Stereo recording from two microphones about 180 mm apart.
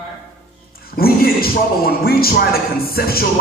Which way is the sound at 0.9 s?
55° left (ahead or behind).